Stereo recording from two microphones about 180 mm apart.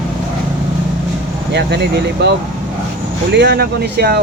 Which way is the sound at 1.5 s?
70° right (ahead or behind).